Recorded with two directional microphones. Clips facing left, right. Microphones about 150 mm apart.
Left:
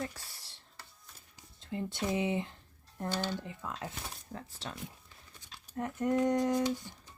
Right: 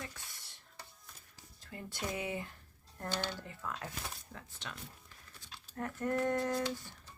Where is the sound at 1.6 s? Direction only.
20° left (ahead or behind).